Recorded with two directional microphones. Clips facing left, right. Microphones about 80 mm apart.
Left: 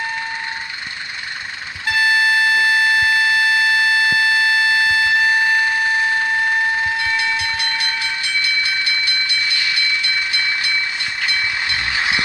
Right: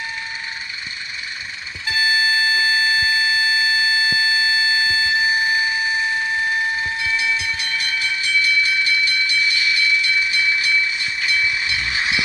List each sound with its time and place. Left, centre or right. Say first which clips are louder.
1.9 s a sound: left 4 dB; left
7.0 s train: left 2 dB; left
10.2 s vehicle: right 1 dB; left